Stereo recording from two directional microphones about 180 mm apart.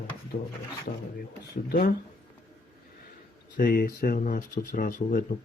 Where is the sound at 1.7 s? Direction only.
55° left (ahead or behind).